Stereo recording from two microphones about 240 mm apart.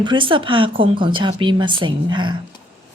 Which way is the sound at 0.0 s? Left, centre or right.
Centre.